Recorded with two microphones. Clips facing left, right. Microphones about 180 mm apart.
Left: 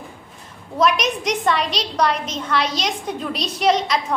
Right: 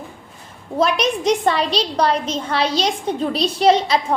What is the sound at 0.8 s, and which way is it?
A woman's voice, 30° right (ahead or behind).